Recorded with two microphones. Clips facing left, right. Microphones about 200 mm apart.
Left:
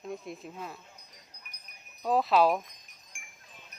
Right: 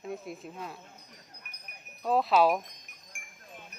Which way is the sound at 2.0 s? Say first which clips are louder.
Even; centre (ahead or behind).